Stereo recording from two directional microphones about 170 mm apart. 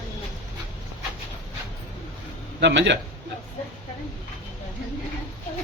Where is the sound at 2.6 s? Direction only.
90° right.